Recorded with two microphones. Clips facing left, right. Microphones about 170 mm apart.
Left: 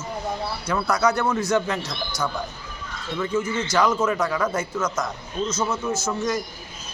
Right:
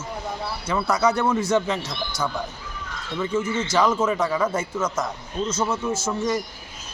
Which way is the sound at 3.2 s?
10° right (ahead or behind).